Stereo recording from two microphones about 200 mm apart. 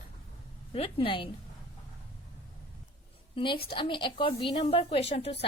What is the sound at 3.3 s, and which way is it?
A woman's voice, 25° left (ahead or behind).